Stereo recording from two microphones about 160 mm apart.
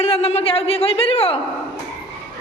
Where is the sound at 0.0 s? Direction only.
40° left (ahead or behind).